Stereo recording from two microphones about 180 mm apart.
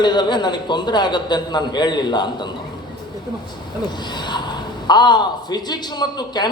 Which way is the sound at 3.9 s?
25° left (ahead or behind).